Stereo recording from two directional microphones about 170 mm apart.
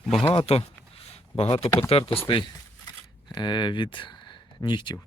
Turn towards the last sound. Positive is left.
turn(degrees=25)  # may be behind; listen again after turning